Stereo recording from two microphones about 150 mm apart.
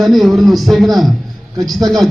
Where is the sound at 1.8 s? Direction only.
25° right (ahead or behind).